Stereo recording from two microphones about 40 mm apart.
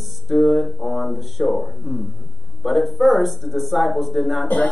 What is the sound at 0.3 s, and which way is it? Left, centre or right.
Speech, centre.